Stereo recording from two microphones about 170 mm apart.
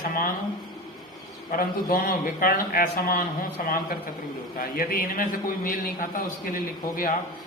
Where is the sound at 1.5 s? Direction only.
55° left (ahead or behind).